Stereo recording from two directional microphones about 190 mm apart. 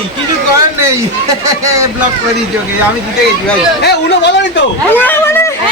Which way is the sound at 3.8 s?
60° left (ahead or behind).